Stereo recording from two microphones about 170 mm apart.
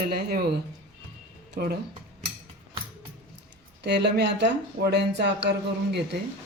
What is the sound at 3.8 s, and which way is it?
Speech, 90° right.